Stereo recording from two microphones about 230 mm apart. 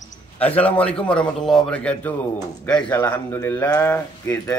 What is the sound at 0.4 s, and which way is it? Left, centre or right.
Speech, centre.